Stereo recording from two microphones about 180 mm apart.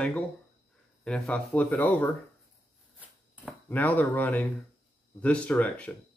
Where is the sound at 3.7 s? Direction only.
10° left (ahead or behind).